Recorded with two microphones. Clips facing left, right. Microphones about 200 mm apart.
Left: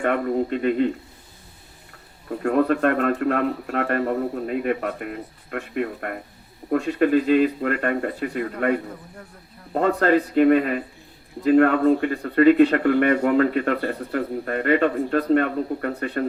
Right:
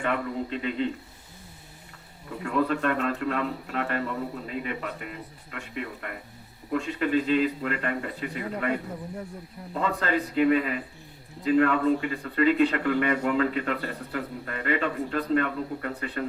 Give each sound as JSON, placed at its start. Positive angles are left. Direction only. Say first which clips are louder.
{"t": 0.0, "sound": "speech", "louder": "left 7 dB", "side_deg": 45}
{"t": 2.3, "sound": "speech", "louder": "left 6 dB", "side_deg": 45}
{"t": 9.7, "sound": "speech", "louder": "left 8 dB", "side_deg": 50}